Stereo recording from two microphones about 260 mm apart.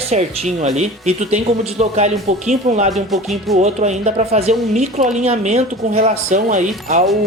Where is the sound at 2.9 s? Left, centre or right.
Centre.